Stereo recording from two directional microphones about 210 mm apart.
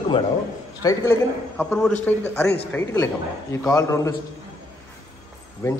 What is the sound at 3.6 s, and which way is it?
Speech, 15° left (ahead or behind).